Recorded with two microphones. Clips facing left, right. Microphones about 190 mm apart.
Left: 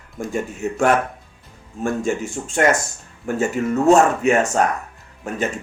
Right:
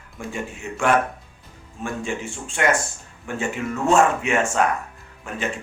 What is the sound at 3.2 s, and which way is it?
Music, 40° left (ahead or behind).